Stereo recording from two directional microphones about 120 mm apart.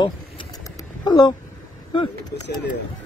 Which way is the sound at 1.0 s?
35° left (ahead or behind).